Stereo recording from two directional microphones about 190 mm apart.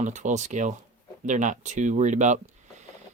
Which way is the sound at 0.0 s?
40° right (ahead or behind).